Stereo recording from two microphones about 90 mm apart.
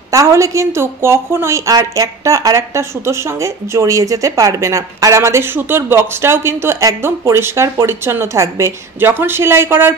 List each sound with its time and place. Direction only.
0.1 s a woman's voice: 35° right (ahead or behind)